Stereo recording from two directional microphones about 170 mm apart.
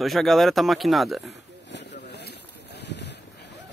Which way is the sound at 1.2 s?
90° left.